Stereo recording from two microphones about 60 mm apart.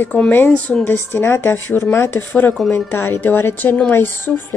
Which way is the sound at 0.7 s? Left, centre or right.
Centre.